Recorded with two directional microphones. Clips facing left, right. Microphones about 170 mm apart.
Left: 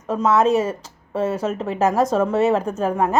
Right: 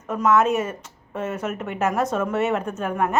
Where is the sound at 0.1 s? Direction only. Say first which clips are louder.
Left 2 dB; 30° left (ahead or behind).